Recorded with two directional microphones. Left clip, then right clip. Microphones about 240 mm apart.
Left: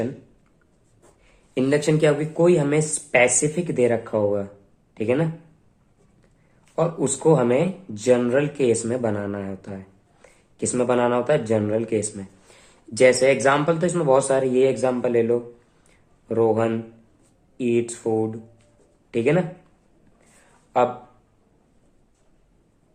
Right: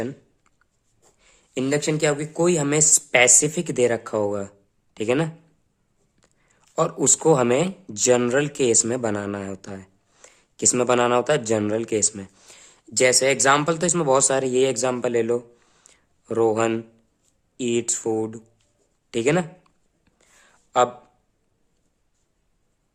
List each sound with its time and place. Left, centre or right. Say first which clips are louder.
1.2 s speech: left 3 dB; right
6.7 s speech: right 2 dB; right
15.8 s a sound: right 1 dB; right
17.6 s speech: left 1 dB; right
20.7 s speech: right 1 dB; right